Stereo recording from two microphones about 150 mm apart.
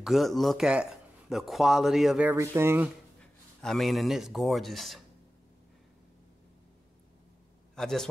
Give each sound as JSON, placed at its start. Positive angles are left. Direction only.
{"t": 0.0, "sound": "speech", "side_deg": 0}
{"t": 2.3, "sound": "speech", "side_deg": -15}
{"t": 3.2, "sound": "a man's voice", "side_deg": 0}
{"t": 7.7, "sound": "a man's voice", "side_deg": 5}